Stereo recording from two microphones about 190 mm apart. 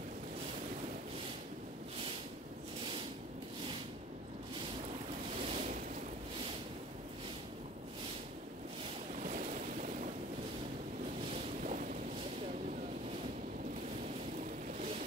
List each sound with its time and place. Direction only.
5.5 s waves: 35° right (ahead or behind)
9.1 s waves: 40° right (ahead or behind)
11.6 s boat: 40° right (ahead or behind)